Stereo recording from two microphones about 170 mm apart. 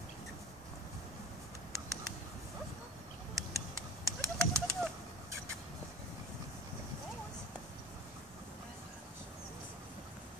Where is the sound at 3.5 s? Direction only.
20° right (ahead or behind).